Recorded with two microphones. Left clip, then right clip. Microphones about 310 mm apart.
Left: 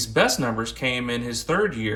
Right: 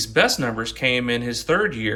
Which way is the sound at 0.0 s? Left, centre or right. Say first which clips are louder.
Right 2 dB; centre.